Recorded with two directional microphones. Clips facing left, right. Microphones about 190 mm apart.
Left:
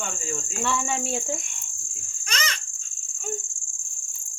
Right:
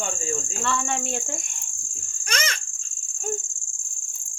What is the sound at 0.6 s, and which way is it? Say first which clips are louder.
Speech: left 1 dB; 5° left (ahead or behind).